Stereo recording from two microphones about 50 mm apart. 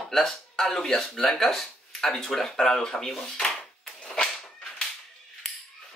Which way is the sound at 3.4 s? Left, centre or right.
Centre.